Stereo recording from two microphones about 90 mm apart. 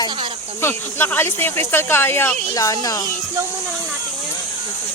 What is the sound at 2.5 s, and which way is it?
Speech, 40° left (ahead or behind).